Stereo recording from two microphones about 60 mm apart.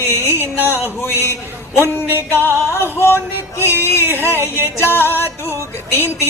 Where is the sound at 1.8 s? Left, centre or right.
Right.